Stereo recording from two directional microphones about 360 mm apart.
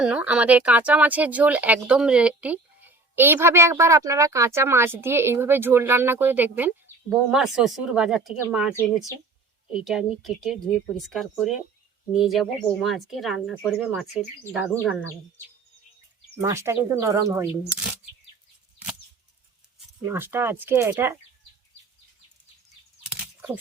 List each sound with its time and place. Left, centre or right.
0.0 s speech: centre
16.4 s speech: centre
20.1 s speech: centre
23.0 s a sound: centre